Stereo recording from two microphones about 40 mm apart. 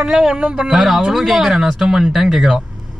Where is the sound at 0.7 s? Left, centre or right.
Centre.